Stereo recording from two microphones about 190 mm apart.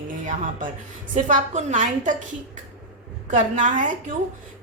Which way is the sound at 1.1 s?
40° right (ahead or behind).